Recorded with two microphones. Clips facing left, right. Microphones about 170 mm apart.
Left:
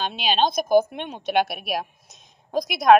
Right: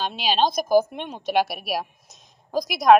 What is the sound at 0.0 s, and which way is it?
A woman's voice, centre (ahead or behind).